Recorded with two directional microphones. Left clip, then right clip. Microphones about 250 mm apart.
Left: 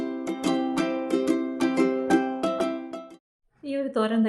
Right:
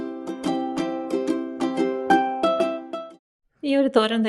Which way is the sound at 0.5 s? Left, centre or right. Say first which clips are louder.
Even; right.